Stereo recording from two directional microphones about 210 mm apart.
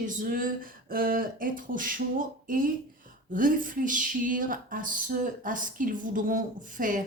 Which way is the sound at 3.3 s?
40° right (ahead or behind).